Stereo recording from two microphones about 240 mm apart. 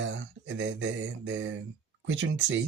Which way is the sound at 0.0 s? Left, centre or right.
Right.